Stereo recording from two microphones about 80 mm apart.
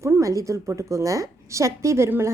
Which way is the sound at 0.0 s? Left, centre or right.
Right.